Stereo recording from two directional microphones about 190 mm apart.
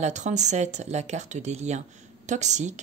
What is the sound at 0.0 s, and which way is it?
A woman's voice, 40° right (ahead or behind).